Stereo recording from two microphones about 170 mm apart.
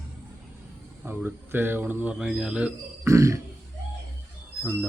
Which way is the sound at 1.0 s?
10° right (ahead or behind).